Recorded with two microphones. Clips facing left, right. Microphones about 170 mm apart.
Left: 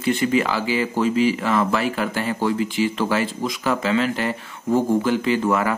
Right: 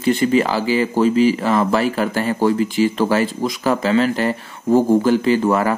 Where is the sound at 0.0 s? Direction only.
35° right (ahead or behind).